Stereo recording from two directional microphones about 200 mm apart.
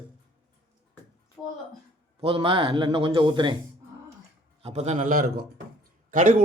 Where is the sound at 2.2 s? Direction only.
25° right (ahead or behind).